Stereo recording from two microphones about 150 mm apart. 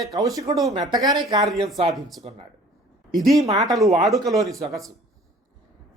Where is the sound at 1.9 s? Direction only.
Centre (ahead or behind).